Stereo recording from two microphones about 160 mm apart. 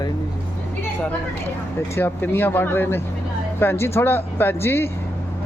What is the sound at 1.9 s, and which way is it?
Speech, 15° left (ahead or behind).